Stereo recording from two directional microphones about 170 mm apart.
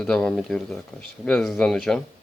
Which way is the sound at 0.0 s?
5° left (ahead or behind).